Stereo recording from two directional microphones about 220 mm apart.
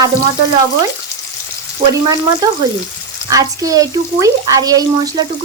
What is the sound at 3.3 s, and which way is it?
Speech, 15° right (ahead or behind).